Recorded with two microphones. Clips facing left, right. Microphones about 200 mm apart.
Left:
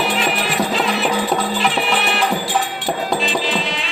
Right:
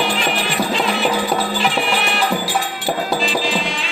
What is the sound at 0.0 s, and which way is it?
Music, centre (ahead or behind).